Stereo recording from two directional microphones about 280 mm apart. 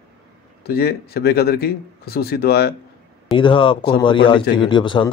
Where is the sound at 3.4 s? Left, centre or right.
Centre.